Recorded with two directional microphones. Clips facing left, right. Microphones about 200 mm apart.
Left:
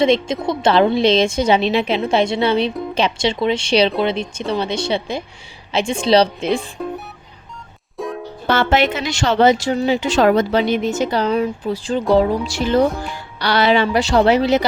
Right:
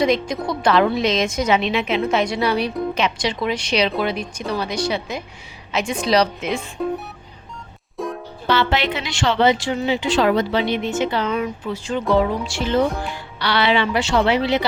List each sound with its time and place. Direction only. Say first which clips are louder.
0.0 s a woman's voice: left 3 dB; 25° left (ahead or behind)
7.9 s music: left 1 dB; centre (ahead or behind)
8.4 s speech: left 3 dB; 50° left (ahead or behind)